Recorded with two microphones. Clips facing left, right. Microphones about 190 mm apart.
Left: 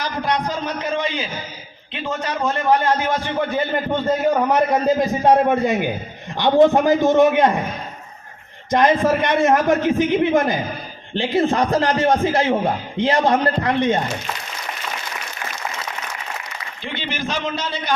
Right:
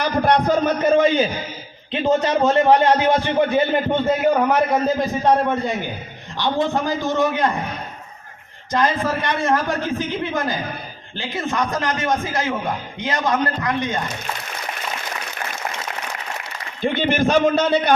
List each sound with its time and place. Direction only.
0.0 s a man's voice: 55° right (ahead or behind)
1.9 s a man's voice: 30° right (ahead or behind)
2.7 s speech: 20° right (ahead or behind)
4.0 s a man's voice: centre (ahead or behind)
5.3 s a man's voice: 15° left (ahead or behind)
8.7 s a man's voice: 20° left (ahead or behind)
16.8 s a man's voice: 50° right (ahead or behind)